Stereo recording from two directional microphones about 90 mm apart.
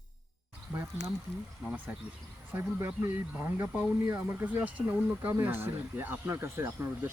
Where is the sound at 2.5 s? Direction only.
25° right (ahead or behind).